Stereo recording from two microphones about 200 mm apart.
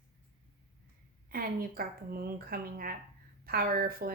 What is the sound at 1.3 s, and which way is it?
Speech, 45° right (ahead or behind).